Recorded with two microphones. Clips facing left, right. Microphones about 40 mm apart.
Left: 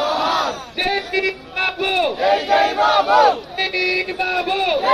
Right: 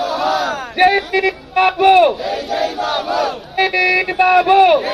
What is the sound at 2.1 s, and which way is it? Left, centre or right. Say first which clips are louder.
Battle cry: left 4 dB; left.